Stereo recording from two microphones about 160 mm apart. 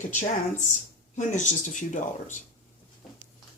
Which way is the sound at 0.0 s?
50° left (ahead or behind).